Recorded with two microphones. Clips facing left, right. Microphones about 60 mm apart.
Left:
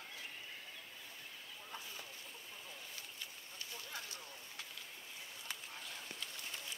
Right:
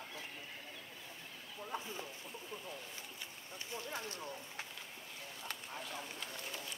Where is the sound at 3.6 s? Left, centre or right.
Right.